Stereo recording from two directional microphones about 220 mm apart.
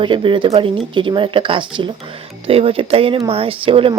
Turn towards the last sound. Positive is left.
turn(degrees=-25)  # may be behind; listen again after turning